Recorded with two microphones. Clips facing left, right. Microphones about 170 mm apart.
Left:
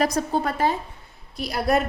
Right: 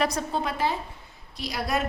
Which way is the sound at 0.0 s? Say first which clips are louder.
Left 4 dB; 45° left (ahead or behind).